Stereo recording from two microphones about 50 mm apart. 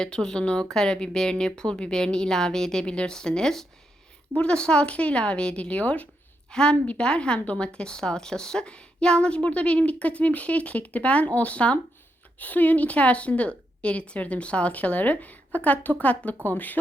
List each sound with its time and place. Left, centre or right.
0.0 s a woman's voice: centre; by 16.8 s left